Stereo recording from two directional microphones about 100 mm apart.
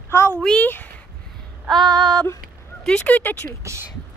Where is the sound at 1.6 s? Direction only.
5° left (ahead or behind).